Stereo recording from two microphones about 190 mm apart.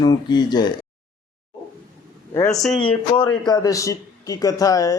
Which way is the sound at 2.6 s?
Centre (ahead or behind).